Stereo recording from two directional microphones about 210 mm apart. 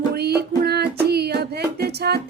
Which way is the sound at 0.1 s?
50° right (ahead or behind).